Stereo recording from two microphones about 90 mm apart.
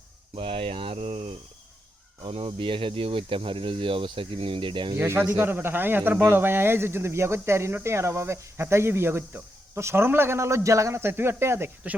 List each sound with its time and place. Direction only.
0.3 s speech: 85° right
2.2 s speech: 65° right (ahead or behind)
4.9 s speech: 25° right (ahead or behind)